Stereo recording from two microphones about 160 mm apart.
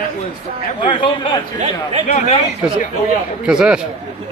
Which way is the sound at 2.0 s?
50° left (ahead or behind).